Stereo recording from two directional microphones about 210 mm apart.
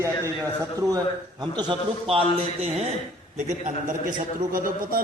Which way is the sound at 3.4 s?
35° right (ahead or behind).